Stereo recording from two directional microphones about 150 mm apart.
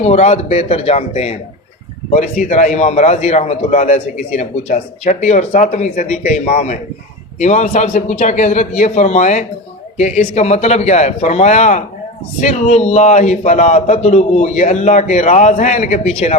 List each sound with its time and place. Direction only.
0.0 s a man's voice: 50° left (ahead or behind)